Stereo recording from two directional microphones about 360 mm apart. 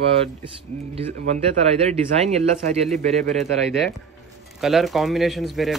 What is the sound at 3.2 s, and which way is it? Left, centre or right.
Speech, centre.